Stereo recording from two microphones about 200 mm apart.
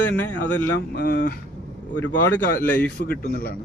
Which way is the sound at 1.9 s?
10° left (ahead or behind).